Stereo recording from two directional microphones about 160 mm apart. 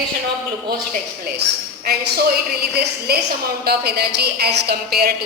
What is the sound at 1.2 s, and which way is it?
A woman's voice, 85° right.